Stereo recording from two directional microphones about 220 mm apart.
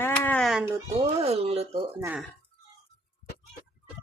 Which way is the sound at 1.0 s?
30° right (ahead or behind).